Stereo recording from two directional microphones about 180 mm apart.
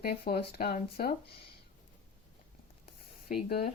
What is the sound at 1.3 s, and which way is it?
Speech, 30° left (ahead or behind).